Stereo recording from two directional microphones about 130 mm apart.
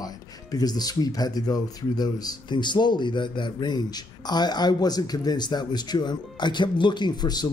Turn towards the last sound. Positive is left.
turn(degrees=30)  # may be behind; listen again after turning